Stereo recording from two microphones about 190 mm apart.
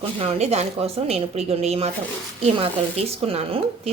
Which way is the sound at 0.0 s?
30° right (ahead or behind).